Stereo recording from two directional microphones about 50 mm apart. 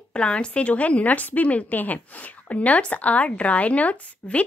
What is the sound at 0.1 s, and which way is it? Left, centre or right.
Speech, left.